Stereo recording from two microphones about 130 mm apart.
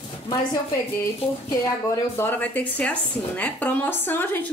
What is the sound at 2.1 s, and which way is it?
A woman's voice, 15° left (ahead or behind).